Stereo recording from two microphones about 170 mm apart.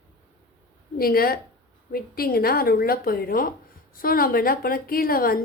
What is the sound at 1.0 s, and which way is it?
Speech, 60° left (ahead or behind).